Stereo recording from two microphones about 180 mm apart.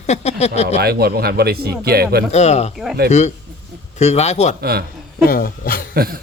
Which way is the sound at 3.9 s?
35° left (ahead or behind).